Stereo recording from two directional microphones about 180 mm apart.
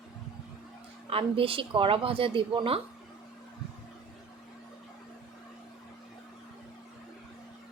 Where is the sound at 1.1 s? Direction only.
30° right (ahead or behind).